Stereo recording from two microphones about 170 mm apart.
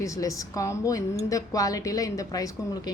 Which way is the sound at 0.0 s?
20° left (ahead or behind).